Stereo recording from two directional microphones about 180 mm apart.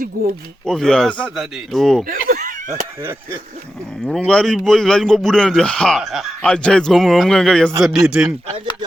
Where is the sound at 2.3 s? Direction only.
50° right (ahead or behind).